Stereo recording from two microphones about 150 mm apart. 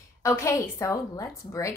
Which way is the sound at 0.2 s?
20° left (ahead or behind).